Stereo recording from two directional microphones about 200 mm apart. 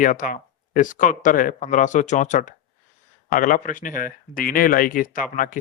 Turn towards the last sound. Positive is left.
turn(degrees=45)  # may be behind; listen again after turning